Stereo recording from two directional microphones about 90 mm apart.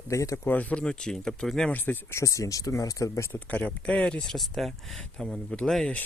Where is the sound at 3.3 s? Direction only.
15° left (ahead or behind).